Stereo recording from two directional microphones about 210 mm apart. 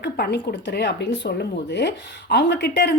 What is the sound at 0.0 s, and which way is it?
A woman's voice, 50° left (ahead or behind).